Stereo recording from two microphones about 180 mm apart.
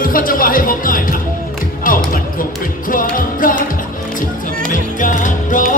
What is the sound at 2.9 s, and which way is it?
Music, 50° left (ahead or behind).